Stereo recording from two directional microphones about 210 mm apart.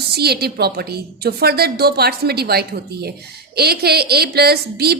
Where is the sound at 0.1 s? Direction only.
50° right (ahead or behind).